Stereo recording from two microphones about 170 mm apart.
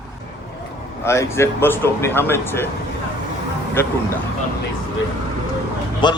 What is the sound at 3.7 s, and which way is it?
Speech, 15° left (ahead or behind).